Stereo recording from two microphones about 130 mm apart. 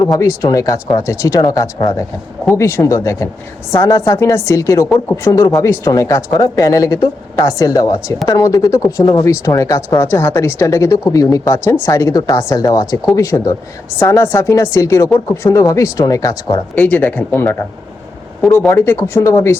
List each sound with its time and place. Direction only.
0.0 s a woman's voice: 25° left (ahead or behind)
16.7 s speech: 10° left (ahead or behind)
18.7 s a woman's voice: 20° left (ahead or behind)